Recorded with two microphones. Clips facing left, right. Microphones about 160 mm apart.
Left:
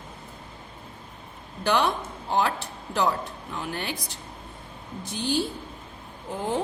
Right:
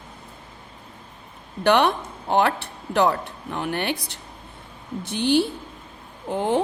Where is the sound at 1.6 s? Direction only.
65° right (ahead or behind).